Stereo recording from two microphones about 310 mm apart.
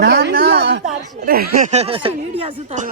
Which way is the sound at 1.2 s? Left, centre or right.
Right.